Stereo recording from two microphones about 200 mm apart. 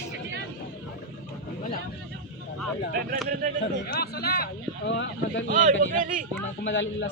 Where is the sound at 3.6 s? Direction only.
50° left (ahead or behind).